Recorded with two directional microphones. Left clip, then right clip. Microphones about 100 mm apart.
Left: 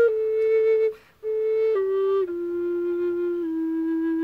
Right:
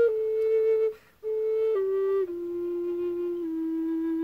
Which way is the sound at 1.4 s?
25° left (ahead or behind).